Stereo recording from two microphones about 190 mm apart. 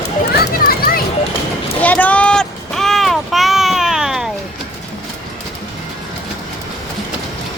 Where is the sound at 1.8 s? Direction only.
5° left (ahead or behind).